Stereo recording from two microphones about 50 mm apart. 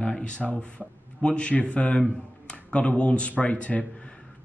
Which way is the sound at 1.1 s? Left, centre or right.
Centre.